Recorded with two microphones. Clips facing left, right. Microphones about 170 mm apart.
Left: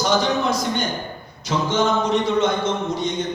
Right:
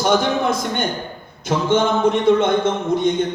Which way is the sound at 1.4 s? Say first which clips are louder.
Right 3 dB; 55° right (ahead or behind).